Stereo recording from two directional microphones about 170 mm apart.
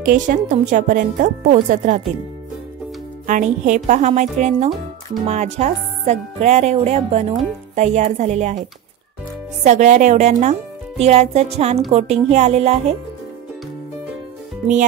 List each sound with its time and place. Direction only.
0.0 s speech: 50° right (ahead or behind)
3.3 s speech: 45° right (ahead or behind)
9.7 s speech: 45° right (ahead or behind)